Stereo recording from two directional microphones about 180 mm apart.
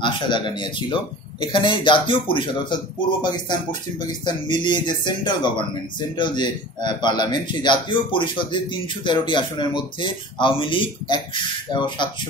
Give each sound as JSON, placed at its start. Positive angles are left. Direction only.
{"t": 0.0, "sound": "speech", "side_deg": 25}